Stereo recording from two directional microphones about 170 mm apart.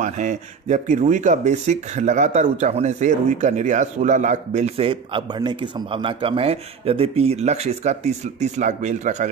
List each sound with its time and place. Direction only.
0.0 s speech: 45° right (ahead or behind)